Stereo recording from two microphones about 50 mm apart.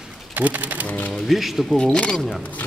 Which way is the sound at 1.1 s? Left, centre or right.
Centre.